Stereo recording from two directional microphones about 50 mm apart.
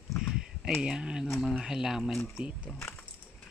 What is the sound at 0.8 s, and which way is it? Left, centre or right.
Speech, centre.